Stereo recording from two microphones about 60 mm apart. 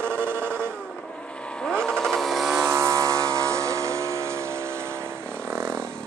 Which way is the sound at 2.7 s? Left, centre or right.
Right.